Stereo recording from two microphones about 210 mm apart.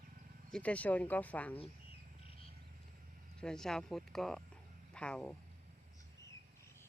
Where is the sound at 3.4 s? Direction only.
5° left (ahead or behind).